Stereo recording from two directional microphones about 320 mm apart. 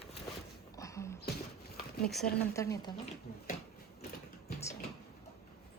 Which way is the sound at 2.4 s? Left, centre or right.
Centre.